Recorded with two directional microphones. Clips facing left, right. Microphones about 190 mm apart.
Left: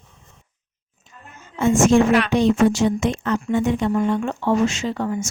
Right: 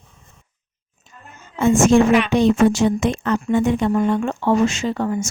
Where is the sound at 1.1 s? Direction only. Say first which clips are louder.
Right 1 dB; 40° right (ahead or behind).